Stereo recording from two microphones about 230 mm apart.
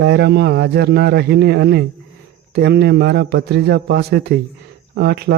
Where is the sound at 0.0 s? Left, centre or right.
Right.